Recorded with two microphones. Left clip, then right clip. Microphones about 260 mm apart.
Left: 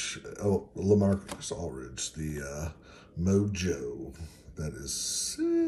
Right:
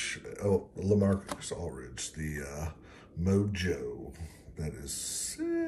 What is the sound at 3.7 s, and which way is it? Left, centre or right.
Speech, centre.